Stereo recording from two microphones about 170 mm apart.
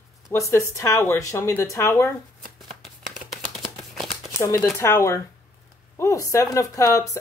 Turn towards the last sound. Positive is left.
turn(degrees=20)  # may be behind; listen again after turning